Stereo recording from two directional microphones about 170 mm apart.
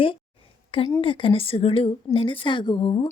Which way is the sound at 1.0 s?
30° left (ahead or behind).